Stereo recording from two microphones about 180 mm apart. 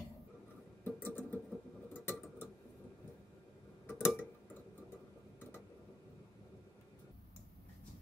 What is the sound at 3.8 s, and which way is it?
Tick-tock, 15° left (ahead or behind).